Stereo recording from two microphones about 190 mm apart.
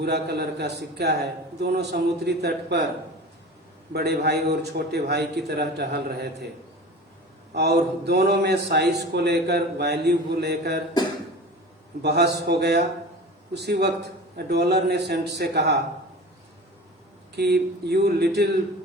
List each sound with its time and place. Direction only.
0.0 s a man's voice: 60° right (ahead or behind)
3.9 s a man's voice: 60° right (ahead or behind)
7.5 s a man's voice: 60° right (ahead or behind)
12.0 s a man's voice: 60° right (ahead or behind)
17.3 s a man's voice: 60° right (ahead or behind)